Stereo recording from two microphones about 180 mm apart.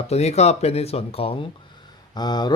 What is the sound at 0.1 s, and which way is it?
A man's voice, 35° left (ahead or behind).